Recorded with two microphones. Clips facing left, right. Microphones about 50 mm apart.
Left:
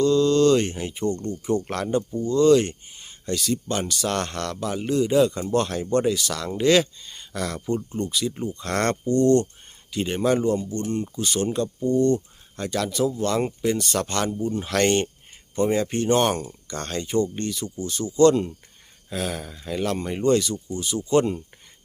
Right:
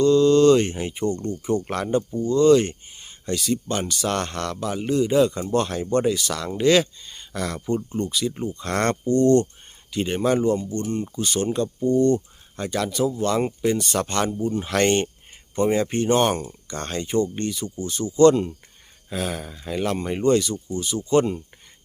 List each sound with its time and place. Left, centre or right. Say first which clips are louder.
0.0 s speech: right 3 dB; centre